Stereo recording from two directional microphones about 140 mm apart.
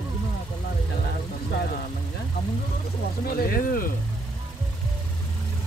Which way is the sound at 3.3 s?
90° left.